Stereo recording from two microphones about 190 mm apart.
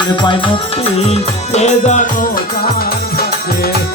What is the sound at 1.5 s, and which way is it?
Music, 40° left (ahead or behind).